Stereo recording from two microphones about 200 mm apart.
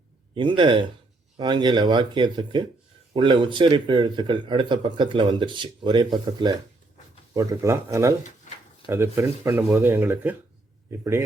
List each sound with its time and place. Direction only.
0.3 s speech: 25° right (ahead or behind)